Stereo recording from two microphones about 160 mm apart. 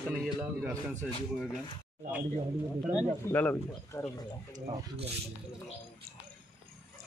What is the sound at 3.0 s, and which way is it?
Speech, 10° left (ahead or behind).